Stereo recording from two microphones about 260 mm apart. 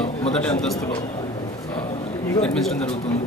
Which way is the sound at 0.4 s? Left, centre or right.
Centre.